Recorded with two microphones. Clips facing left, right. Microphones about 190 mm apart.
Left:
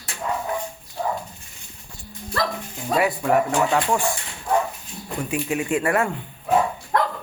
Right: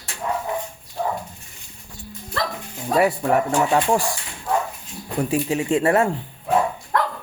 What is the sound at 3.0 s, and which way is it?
Speech, 35° right (ahead or behind).